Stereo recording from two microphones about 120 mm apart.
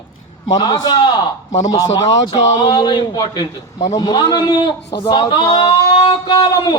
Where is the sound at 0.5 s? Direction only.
35° left (ahead or behind).